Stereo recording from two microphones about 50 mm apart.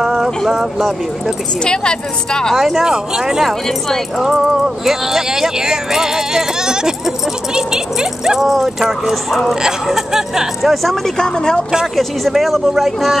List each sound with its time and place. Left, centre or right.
0.0 s clip-clop: centre
0.5 s speech: centre
1.6 s a woman's voice: centre
2.5 s speech: centre
10.6 s speech: centre
11.1 s a woman's voice: centre
11.8 s speech: centre